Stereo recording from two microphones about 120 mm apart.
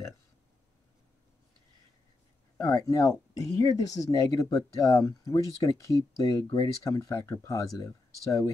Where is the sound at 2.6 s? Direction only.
30° left (ahead or behind).